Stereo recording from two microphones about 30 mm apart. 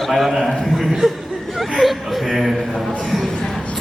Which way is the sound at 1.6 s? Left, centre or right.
Centre.